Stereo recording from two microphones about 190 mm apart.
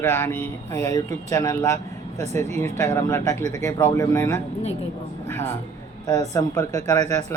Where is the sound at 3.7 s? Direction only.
15° left (ahead or behind).